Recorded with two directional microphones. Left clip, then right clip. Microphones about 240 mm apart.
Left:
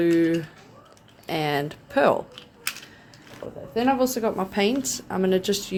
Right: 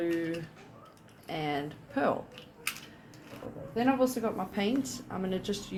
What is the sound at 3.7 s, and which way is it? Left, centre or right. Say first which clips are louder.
A woman's voice: left 6 dB; left.